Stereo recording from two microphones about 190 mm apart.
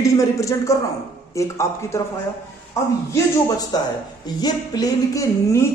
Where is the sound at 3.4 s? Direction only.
20° left (ahead or behind).